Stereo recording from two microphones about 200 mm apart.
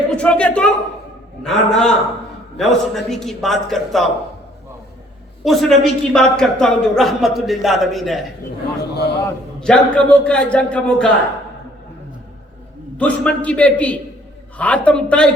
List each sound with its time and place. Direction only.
0.1 s a woman's voice: 5° left (ahead or behind)
5.4 s speech: centre (ahead or behind)
8.9 s a man's voice: 55° left (ahead or behind)
9.6 s speech: 5° left (ahead or behind)
13.0 s a man's voice: 5° left (ahead or behind)